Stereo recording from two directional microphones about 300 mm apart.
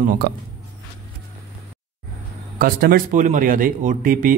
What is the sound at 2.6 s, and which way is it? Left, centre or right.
Speech, right.